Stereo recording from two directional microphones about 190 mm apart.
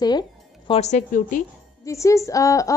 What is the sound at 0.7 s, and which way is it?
Speech, 35° left (ahead or behind).